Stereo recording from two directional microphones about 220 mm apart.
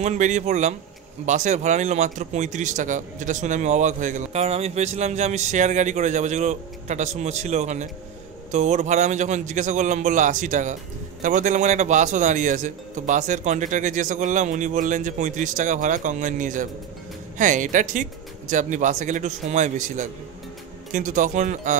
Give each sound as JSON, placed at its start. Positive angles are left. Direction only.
{"t": 0.0, "sound": "a man's voice", "side_deg": -30}